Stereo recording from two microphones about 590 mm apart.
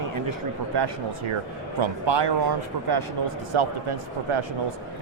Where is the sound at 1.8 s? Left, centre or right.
Right.